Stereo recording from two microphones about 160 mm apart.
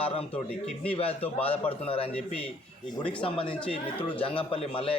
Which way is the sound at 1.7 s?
35° left (ahead or behind).